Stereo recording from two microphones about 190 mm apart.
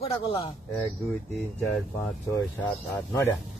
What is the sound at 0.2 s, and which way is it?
Speech, 30° left (ahead or behind).